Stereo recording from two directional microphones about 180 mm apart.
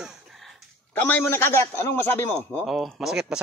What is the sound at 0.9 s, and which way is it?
Speech, 10° left (ahead or behind).